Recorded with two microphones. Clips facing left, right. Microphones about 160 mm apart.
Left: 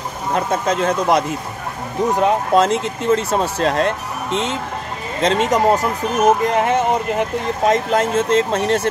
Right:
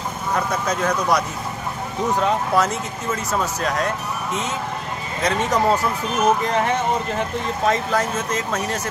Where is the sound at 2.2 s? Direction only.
20° left (ahead or behind).